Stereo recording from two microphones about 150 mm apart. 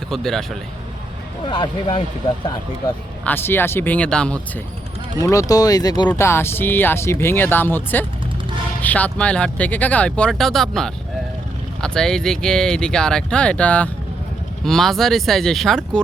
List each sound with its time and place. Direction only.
0.1 s speech: 5° left (ahead or behind)
1.5 s speech: 35° left (ahead or behind)
3.2 s speech: 15° left (ahead or behind)
5.2 s speech: 20° left (ahead or behind); by 16.0 s centre (ahead or behind)